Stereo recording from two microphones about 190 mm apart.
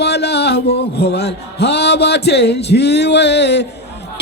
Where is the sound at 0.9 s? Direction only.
60° left (ahead or behind).